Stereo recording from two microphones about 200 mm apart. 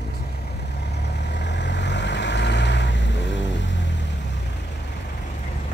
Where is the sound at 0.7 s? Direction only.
55° left (ahead or behind).